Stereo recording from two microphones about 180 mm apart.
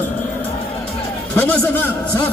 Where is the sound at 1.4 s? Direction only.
10° left (ahead or behind).